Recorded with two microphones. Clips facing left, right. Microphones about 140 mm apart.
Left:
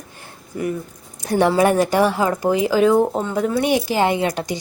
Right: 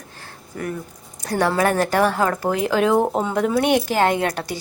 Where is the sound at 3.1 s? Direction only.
10° right (ahead or behind).